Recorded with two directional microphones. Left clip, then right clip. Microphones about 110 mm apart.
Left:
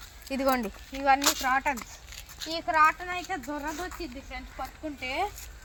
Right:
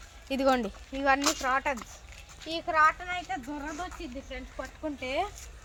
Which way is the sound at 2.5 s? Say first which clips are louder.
Left 1 dB; 20° right (ahead or behind).